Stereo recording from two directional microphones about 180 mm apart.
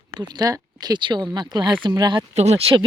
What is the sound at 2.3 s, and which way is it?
Speech, 35° right (ahead or behind).